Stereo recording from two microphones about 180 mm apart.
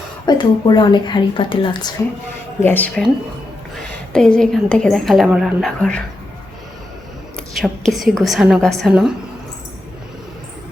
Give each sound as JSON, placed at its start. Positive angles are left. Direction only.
{"t": 0.3, "sound": "a woman's voice", "side_deg": 25}
{"t": 2.6, "sound": "speech", "side_deg": 10}
{"t": 4.1, "sound": "a woman's voice", "side_deg": 5}
{"t": 7.3, "sound": "a woman's voice", "side_deg": 0}